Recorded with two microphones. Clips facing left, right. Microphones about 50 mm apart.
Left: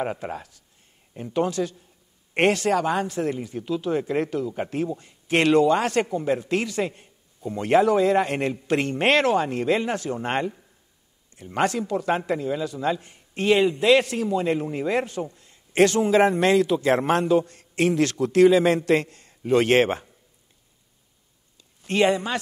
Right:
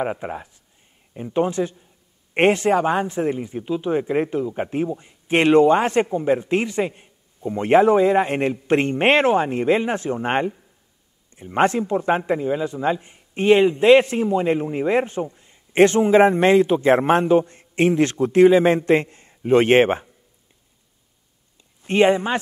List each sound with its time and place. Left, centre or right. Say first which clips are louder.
0.0 s a man's voice: right 3 dB; centre
21.8 s a man's voice: right 4 dB; right